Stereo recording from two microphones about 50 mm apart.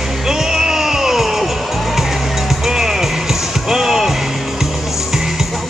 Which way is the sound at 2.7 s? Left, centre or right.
Centre.